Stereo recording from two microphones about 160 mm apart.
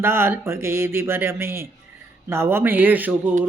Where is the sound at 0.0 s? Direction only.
15° right (ahead or behind).